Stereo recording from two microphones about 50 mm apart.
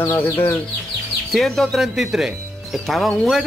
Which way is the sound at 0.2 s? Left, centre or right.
Left.